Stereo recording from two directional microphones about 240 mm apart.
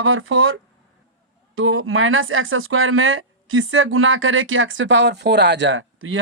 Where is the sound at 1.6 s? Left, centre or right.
Right.